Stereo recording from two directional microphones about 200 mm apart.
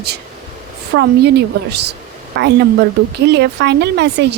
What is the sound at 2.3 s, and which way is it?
Speech, 55° right (ahead or behind).